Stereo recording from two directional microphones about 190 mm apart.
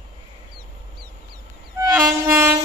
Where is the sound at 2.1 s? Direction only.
10° right (ahead or behind).